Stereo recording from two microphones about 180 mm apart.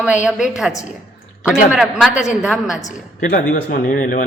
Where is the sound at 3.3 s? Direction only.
50° left (ahead or behind).